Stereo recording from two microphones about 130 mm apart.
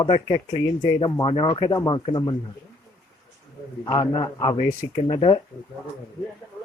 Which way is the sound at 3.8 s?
35° left (ahead or behind).